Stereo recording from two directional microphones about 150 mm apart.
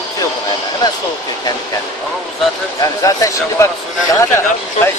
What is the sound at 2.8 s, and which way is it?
Speech, 20° left (ahead or behind).